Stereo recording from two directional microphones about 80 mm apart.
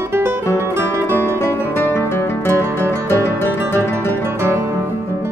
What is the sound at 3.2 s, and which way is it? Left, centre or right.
Music, left.